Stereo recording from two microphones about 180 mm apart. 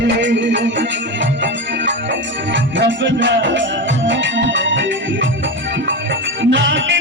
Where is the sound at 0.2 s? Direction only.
80° right.